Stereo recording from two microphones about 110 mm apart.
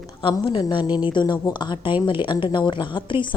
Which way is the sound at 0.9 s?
10° right (ahead or behind).